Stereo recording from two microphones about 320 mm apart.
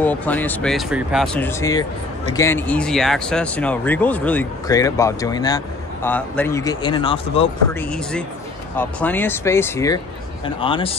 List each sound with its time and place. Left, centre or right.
0.0 s a man's voice: centre
8.7 s a man's voice: centre